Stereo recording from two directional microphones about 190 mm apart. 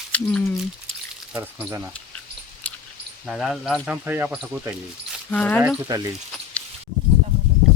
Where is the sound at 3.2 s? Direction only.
Centre (ahead or behind).